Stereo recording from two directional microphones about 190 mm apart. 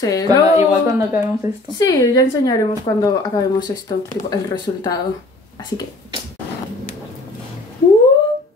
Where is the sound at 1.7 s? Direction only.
20° left (ahead or behind).